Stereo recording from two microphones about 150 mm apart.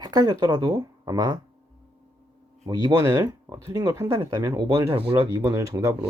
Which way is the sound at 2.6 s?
25° right (ahead or behind).